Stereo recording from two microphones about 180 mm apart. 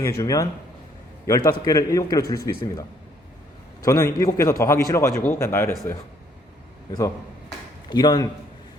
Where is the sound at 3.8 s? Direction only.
15° left (ahead or behind).